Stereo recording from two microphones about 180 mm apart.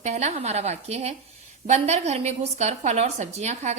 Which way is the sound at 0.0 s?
40° right (ahead or behind).